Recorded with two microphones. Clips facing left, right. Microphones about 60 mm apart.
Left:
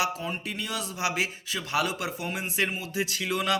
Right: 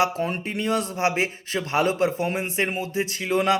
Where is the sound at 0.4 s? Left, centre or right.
Right.